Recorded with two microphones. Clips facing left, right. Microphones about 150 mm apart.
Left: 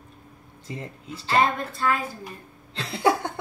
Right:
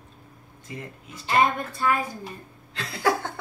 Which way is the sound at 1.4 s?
15° right (ahead or behind).